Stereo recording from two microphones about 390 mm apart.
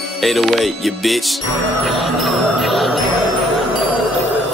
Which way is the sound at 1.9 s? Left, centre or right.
Centre.